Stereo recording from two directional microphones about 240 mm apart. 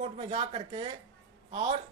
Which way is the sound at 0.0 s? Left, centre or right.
Right.